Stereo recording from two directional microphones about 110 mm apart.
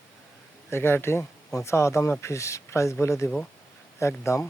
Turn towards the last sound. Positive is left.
turn(degrees=25)  # may be behind; listen again after turning